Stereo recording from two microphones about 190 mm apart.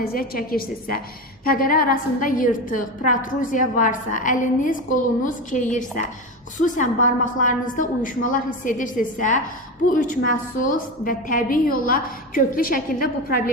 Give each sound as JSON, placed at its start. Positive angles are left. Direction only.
{"t": 0.0, "sound": "a woman's voice", "side_deg": 50}